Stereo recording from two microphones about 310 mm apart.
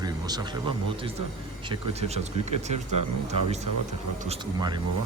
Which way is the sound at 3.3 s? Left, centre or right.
Right.